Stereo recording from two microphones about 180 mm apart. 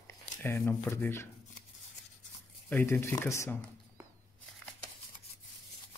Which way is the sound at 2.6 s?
10° left (ahead or behind).